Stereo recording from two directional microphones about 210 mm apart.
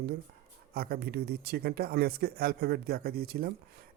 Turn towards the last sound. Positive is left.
turn(degrees=-45)  # may be behind; listen again after turning